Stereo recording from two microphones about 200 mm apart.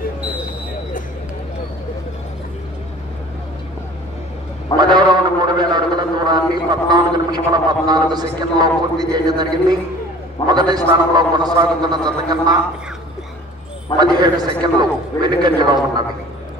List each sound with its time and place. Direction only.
4.7 s a sound: 20° right (ahead or behind)
6.2 s a man's voice: 20° right (ahead or behind)
13.9 s a man's voice: 20° right (ahead or behind)